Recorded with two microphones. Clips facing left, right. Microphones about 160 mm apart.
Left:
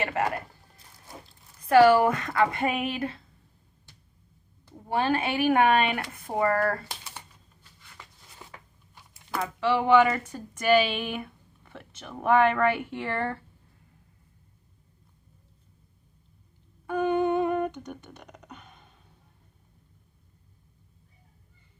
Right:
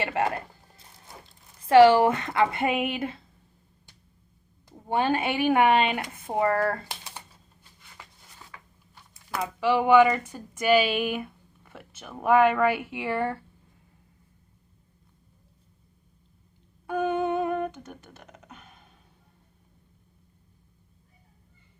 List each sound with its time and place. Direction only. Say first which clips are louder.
0.0 s speech: right 1 dB; 25° right (ahead or behind)
1.6 s speech: right 2 dB; 25° right (ahead or behind)
4.6 s speech: right 1 dB; 20° right (ahead or behind)
9.3 s speech: right 1 dB; 10° right (ahead or behind)
16.8 s beatboxing: left 1 dB; 10° right (ahead or behind)